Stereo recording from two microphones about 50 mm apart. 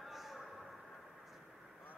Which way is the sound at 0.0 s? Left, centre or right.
Centre.